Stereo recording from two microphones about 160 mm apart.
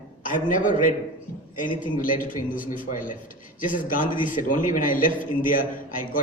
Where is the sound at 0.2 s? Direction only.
55° left (ahead or behind).